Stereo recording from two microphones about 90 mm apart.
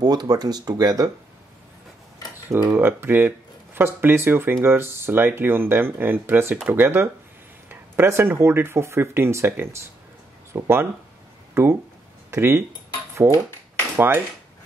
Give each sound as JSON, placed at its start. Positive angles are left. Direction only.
{"t": 0.0, "sound": "speech", "side_deg": -45}
{"t": 2.4, "sound": "speech", "side_deg": -25}
{"t": 13.9, "sound": "speech", "side_deg": -25}